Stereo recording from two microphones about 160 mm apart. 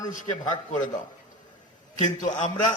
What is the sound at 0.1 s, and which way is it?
Speech, 50° left (ahead or behind).